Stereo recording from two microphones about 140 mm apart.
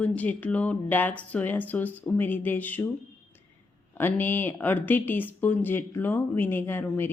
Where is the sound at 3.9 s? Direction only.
15° left (ahead or behind).